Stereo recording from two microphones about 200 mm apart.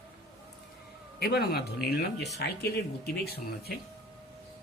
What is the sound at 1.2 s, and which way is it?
Speech, 50° left (ahead or behind).